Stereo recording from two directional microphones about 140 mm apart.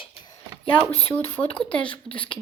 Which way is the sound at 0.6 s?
10° left (ahead or behind).